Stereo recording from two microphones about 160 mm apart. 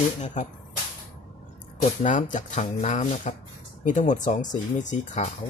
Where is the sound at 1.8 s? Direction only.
50° left (ahead or behind).